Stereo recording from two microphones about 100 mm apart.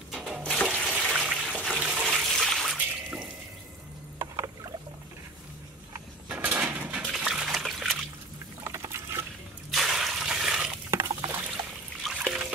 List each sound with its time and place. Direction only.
0.1 s water: centre (ahead or behind)
0.9 s toilet flush: 15° right (ahead or behind)
1.8 s water: 15° right (ahead or behind)
2.1 s water: centre (ahead or behind)
6.2 s a sound: 15° right (ahead or behind)
8.6 s liquid: 25° right (ahead or behind)
9.7 s a sound: 5° right (ahead or behind)
10.9 s a sound: 30° right (ahead or behind)
12.0 s trickle: 5° right (ahead or behind)